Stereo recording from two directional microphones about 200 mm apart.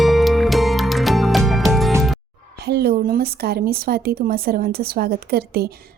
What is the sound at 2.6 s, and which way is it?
Speech, 55° right (ahead or behind).